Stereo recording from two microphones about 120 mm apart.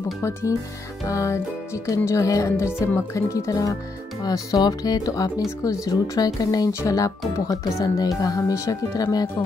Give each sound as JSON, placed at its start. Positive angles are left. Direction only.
{"t": 1.0, "sound": "speech", "side_deg": 25}